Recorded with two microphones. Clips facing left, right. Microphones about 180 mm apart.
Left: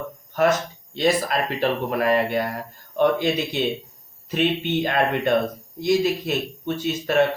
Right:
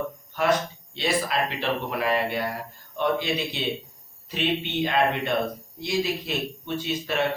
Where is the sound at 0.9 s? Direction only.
45° left (ahead or behind).